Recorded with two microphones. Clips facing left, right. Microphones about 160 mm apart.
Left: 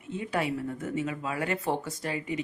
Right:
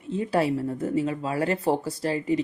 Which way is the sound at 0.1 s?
35° right (ahead or behind).